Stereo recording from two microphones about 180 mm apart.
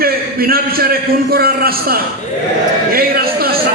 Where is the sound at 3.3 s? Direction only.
55° right (ahead or behind).